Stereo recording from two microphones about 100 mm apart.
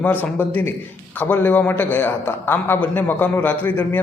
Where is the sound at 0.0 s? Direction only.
20° left (ahead or behind).